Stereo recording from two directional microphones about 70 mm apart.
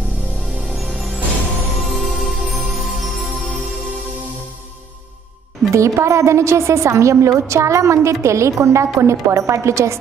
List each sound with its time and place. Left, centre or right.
0.6 s music: centre
5.7 s a woman's voice: right